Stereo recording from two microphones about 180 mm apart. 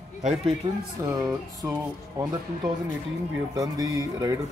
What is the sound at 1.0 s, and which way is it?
Speech, 15° right (ahead or behind).